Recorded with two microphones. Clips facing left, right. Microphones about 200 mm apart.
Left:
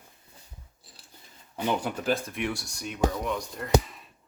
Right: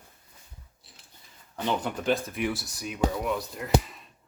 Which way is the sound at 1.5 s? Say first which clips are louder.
Left 1 dB; 10° left (ahead or behind).